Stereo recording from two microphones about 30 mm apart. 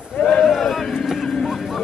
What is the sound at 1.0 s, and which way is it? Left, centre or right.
Vehicle, centre.